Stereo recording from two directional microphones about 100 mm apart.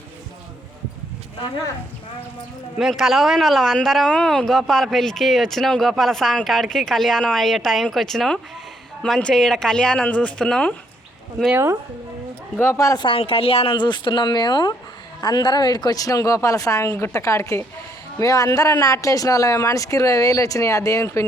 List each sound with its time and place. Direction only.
1.4 s speech: 40° left (ahead or behind)
2.7 s speech: 5° right (ahead or behind)
11.5 s speech: 25° right (ahead or behind)
12.5 s speech: 30° left (ahead or behind)
13.0 s speech: 65° left (ahead or behind)
13.7 s a woman's voice: 50° left (ahead or behind); by 21.2 s 30° left (ahead or behind)